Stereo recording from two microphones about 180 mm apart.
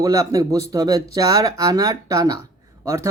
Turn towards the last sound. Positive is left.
turn(degrees=-15)  # may be behind; listen again after turning